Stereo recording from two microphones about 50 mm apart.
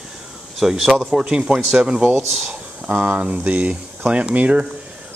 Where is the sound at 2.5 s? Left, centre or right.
Right.